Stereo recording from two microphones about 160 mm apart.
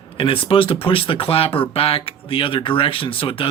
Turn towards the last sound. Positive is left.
turn(degrees=35)  # may be behind; listen again after turning